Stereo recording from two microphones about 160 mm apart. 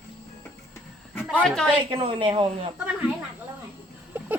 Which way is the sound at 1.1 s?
5° left (ahead or behind).